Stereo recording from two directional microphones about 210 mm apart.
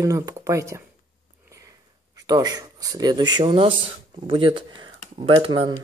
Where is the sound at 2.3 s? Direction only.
20° right (ahead or behind).